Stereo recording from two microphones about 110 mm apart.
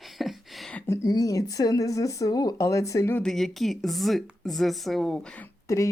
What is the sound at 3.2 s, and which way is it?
Speech, 5° left (ahead or behind).